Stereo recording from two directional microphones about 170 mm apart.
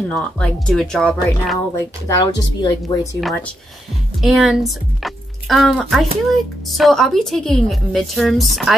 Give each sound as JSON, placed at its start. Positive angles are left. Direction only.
{"t": 0.1, "sound": "speech", "side_deg": 5}
{"t": 2.0, "sound": "speech", "side_deg": 25}
{"t": 3.2, "sound": "speech", "side_deg": 0}